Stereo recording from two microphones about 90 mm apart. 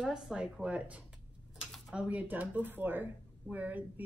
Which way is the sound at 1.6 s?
Centre (ahead or behind).